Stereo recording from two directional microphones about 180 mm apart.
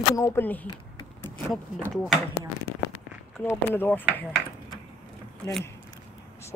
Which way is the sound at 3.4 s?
10° left (ahead or behind).